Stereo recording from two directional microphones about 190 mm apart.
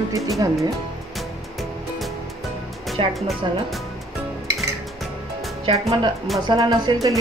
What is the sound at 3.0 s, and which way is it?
Speech, 30° right (ahead or behind).